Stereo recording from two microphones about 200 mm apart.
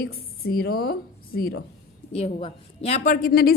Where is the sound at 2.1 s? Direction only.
30° left (ahead or behind); by 3.5 s 50° left (ahead or behind).